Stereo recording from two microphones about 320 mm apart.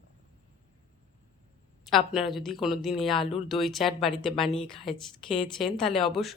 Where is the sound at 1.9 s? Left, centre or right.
Centre.